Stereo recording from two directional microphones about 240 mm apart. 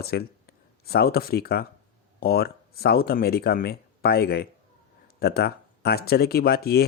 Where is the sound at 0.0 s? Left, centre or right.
Left.